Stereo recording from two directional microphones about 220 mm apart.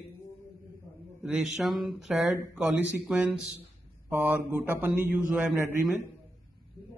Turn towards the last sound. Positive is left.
turn(degrees=-5)  # may be behind; listen again after turning